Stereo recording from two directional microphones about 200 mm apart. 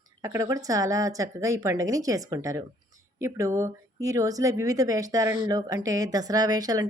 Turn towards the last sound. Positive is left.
turn(degrees=-20)  # may be behind; listen again after turning